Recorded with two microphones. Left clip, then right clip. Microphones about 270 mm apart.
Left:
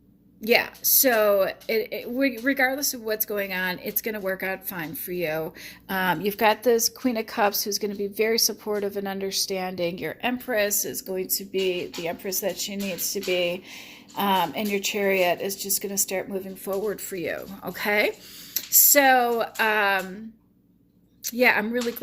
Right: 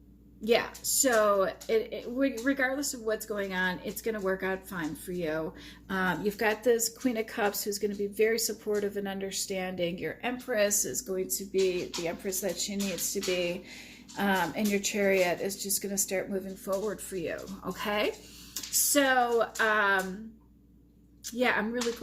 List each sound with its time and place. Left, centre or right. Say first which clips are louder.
0.4 s speech: left 5 dB; left
21.2 s speech: left 8 dB; left